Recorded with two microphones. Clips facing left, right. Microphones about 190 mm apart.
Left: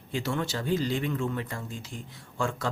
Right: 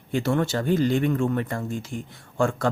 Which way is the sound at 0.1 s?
55° right (ahead or behind).